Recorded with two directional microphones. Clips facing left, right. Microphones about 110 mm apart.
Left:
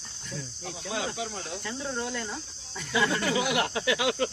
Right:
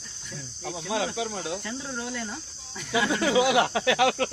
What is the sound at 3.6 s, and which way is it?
Speech, 90° right.